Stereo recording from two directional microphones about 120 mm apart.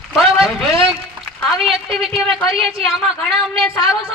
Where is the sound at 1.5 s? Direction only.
Centre (ahead or behind).